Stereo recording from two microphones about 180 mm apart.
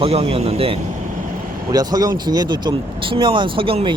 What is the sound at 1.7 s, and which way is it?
Speech, 20° right (ahead or behind).